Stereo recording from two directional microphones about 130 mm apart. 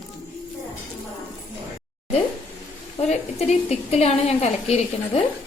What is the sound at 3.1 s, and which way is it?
A woman's voice, 55° left (ahead or behind).